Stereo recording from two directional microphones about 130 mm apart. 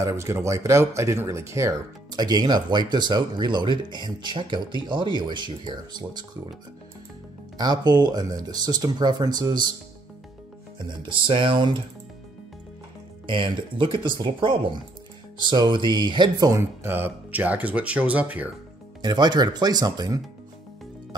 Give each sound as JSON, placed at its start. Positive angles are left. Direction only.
{"t": 0.0, "sound": "speech", "side_deg": -20}
{"t": 7.5, "sound": "speech", "side_deg": -30}
{"t": 10.9, "sound": "speech", "side_deg": -40}
{"t": 13.4, "sound": "speech", "side_deg": -40}
{"t": 18.9, "sound": "speech", "side_deg": -35}